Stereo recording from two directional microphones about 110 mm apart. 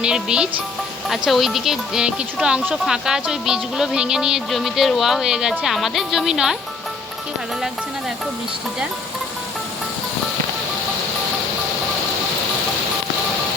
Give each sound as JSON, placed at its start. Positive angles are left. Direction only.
{"t": 0.0, "sound": "speech", "side_deg": -10}